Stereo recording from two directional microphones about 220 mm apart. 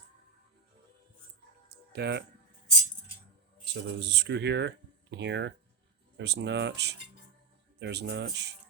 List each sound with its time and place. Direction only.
1.9 s speech: 50° right (ahead or behind)
3.6 s speech: 50° right (ahead or behind)